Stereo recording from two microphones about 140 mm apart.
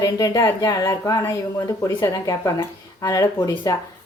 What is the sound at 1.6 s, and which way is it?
Speech, 25° left (ahead or behind).